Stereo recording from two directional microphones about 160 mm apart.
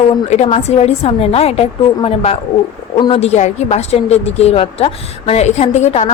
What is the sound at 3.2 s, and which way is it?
Speech, 45° left (ahead or behind).